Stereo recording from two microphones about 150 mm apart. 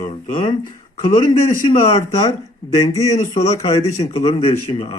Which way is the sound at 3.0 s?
25° left (ahead or behind).